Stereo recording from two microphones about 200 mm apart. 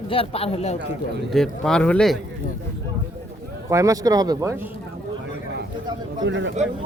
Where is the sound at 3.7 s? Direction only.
15° right (ahead or behind).